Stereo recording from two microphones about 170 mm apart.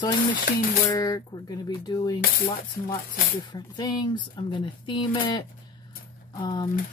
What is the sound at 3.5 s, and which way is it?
Speech, 25° left (ahead or behind).